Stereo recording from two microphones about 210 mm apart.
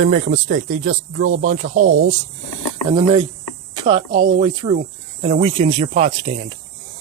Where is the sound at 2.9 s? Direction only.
20° right (ahead or behind).